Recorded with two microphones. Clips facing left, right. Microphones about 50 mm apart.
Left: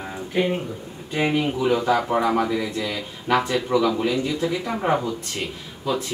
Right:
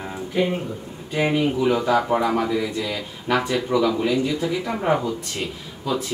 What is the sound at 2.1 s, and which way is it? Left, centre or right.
A man's voice, centre.